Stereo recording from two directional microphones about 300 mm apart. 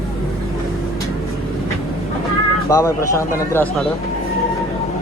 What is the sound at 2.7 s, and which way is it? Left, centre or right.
Speech, centre.